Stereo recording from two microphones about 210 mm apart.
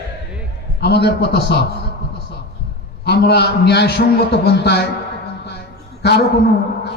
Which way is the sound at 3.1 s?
50° left (ahead or behind).